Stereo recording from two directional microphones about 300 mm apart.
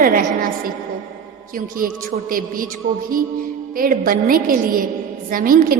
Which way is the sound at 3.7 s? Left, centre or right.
Right.